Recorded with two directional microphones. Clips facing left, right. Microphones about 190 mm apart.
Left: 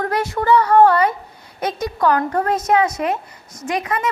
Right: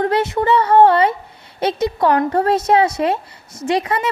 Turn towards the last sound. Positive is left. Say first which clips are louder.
# right 3 dB
turn(degrees=-30)  # may be behind; listen again after turning